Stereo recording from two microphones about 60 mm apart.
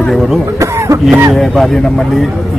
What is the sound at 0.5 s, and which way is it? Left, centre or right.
Cough, right.